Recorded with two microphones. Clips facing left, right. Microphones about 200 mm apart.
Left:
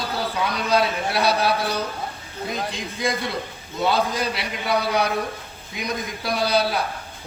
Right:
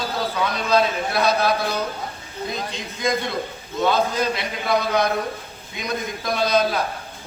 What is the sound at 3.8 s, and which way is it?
A man's voice, 10° left (ahead or behind).